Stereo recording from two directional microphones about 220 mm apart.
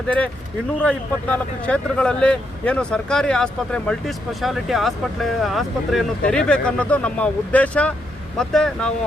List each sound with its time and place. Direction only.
0.8 s speech: 5° left (ahead or behind)